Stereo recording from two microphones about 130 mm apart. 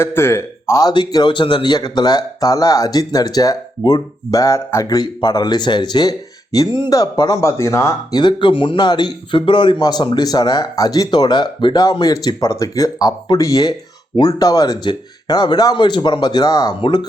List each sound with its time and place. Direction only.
0.0 s speech: 20° left (ahead or behind)
8.1 s speech: 35° left (ahead or behind)